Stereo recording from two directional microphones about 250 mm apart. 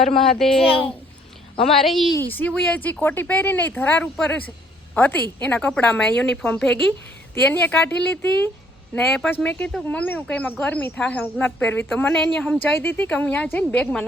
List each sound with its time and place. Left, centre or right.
0.3 s speech: centre
1.8 s speech: centre